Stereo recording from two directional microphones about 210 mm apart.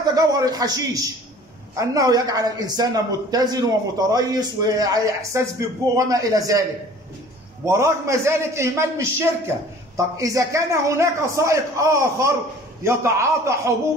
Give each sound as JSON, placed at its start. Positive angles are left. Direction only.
{"t": 0.1, "sound": "speech", "side_deg": -15}
{"t": 7.6, "sound": "speech", "side_deg": -15}